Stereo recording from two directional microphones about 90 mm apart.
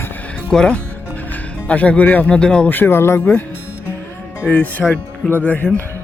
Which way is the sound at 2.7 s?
25° left (ahead or behind).